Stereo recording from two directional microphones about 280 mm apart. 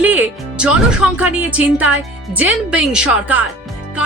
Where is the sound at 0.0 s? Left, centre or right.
Centre.